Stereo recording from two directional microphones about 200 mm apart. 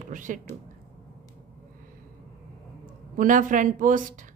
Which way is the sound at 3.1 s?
40° right (ahead or behind).